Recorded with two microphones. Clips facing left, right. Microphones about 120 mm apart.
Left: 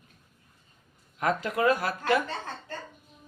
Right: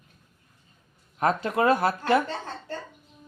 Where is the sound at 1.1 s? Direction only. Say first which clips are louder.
Right 3 dB; 30° right (ahead or behind).